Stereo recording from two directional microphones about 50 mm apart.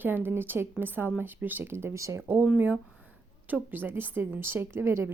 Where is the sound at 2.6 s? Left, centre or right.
Right.